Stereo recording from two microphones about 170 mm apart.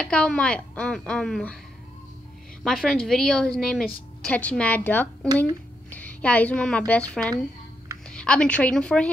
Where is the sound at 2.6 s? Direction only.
Centre (ahead or behind).